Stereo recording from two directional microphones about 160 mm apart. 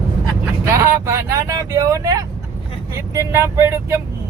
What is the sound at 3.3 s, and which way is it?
Speech, 15° right (ahead or behind).